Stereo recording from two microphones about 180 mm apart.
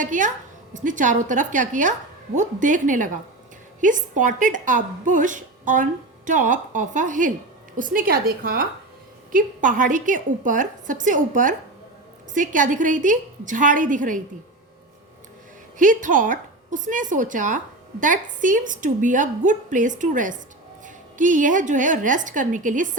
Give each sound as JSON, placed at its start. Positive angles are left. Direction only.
{"t": 0.0, "sound": "a woman's voice", "side_deg": -45}
{"t": 15.8, "sound": "a woman's voice", "side_deg": -45}